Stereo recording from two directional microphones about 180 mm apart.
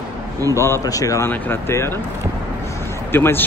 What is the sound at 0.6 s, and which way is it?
Speech, 15° left (ahead or behind).